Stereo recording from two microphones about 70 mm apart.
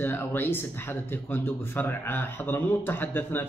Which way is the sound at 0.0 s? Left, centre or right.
Left.